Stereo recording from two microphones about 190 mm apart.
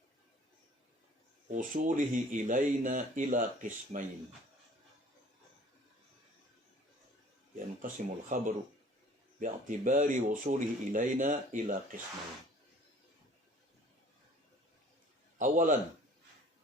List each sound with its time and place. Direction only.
1.5 s speech: 45° right (ahead or behind)
7.8 s speech: 45° right (ahead or behind)
15.4 s speech: 45° right (ahead or behind)